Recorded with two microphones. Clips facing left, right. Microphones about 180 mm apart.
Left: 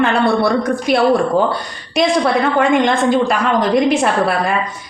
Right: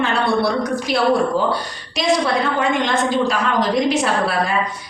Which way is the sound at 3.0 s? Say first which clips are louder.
Left 4 dB; 55° left (ahead or behind).